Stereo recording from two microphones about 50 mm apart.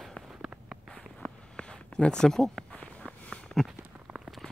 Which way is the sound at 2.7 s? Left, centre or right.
Left.